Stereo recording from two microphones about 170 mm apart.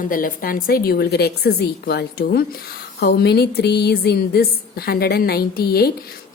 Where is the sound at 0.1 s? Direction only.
55° left (ahead or behind).